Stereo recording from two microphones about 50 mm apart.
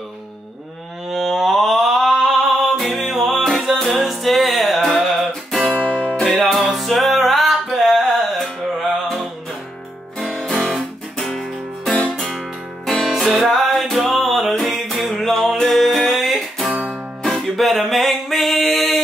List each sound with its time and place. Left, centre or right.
1.1 s music: centre
5.8 s music: left
6.2 s music: centre
10.1 s music: centre